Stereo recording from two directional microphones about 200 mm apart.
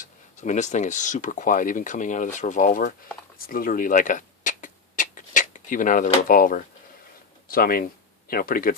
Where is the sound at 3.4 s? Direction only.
45° left (ahead or behind).